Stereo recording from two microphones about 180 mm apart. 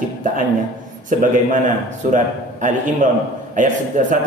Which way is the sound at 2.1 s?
45° right (ahead or behind).